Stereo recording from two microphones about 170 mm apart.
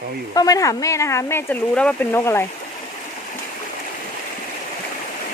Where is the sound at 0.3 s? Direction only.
20° left (ahead or behind).